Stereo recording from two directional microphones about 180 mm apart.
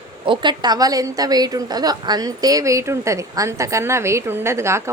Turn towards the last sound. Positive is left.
turn(degrees=-15)  # may be behind; listen again after turning